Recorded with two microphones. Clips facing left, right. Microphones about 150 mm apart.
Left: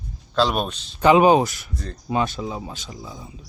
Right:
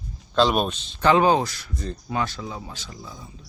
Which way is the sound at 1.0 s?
15° left (ahead or behind).